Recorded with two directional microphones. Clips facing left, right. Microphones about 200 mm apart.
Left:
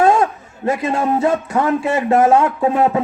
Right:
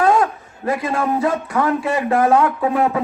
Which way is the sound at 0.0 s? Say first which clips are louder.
Left 2 dB; 25° left (ahead or behind).